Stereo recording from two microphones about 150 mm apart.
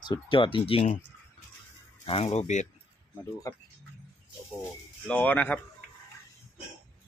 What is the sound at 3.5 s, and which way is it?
Speech, 20° left (ahead or behind).